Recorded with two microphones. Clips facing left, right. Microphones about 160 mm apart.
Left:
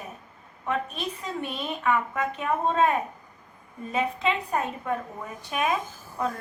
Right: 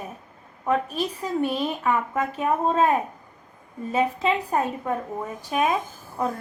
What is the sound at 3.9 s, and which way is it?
A woman's voice, 30° right (ahead or behind).